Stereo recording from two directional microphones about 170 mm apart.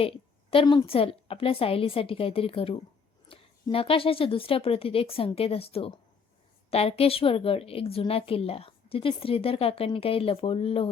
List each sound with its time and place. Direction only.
0.5 s a woman's voice: 25° left (ahead or behind)